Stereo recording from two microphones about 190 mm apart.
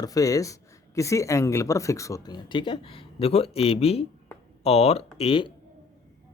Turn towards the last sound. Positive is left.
turn(degrees=30)  # may be behind; listen again after turning